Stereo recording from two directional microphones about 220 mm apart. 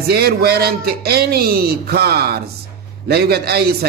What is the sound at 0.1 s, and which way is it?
A man's voice, 45° right (ahead or behind).